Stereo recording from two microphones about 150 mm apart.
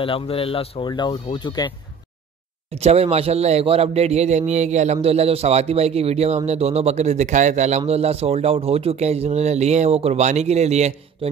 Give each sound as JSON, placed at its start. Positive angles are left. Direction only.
{"t": 0.0, "sound": "speech", "side_deg": 35}
{"t": 2.7, "sound": "speech", "side_deg": -45}